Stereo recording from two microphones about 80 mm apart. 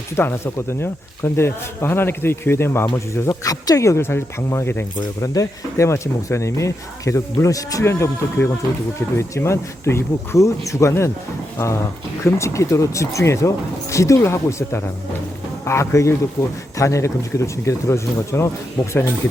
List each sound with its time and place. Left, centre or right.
0.2 s a man's voice: left
2.8 s a man's voice: left
5.2 s a man's voice: left
12.2 s a man's voice: left